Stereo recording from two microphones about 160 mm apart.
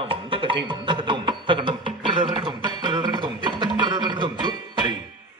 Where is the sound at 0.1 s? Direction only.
35° right (ahead or behind).